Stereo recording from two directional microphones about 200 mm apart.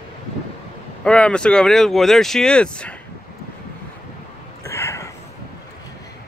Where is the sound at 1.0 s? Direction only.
5° left (ahead or behind).